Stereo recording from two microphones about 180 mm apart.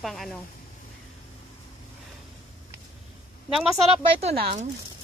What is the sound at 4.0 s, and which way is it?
Speech, 35° right (ahead or behind).